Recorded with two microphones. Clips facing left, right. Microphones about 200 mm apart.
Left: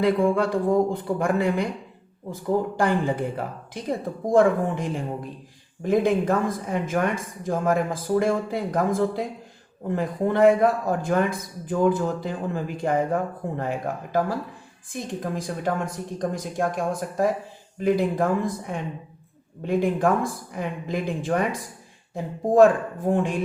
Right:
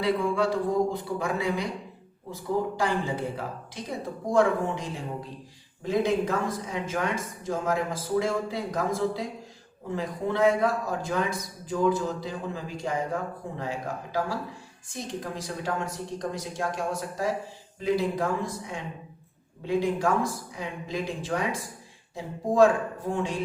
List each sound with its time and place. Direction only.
0.0 s a man's voice: 50° left (ahead or behind)